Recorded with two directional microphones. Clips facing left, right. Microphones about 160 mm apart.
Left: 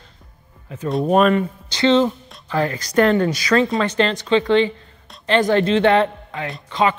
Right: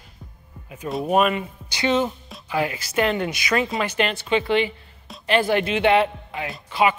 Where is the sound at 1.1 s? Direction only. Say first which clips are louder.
Left 4 dB; 10° right (ahead or behind).